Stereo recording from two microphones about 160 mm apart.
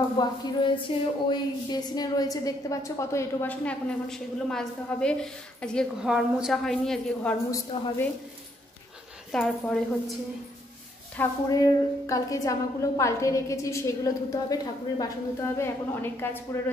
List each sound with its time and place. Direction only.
0.2 s a woman's voice: 30° left (ahead or behind); by 7.3 s centre (ahead or behind)
9.3 s a woman's voice: 5° left (ahead or behind)
11.2 s a woman's voice: 10° left (ahead or behind)